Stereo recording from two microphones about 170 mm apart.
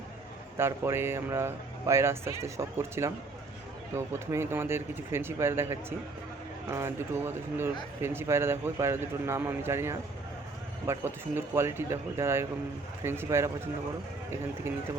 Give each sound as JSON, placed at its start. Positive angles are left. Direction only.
{"t": 0.5, "sound": "speech", "side_deg": -15}